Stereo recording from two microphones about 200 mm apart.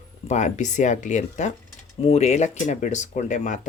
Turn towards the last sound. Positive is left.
turn(degrees=35)  # may be behind; listen again after turning